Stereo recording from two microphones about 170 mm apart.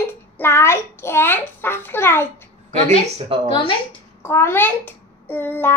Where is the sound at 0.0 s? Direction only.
15° left (ahead or behind).